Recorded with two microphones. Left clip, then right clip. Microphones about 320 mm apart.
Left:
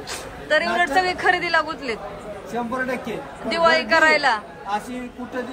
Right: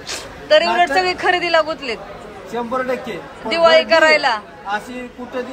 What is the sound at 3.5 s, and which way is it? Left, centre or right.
Speech, centre.